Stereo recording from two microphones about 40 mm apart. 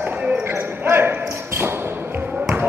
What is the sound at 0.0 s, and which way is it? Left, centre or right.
Basketball bounce, right.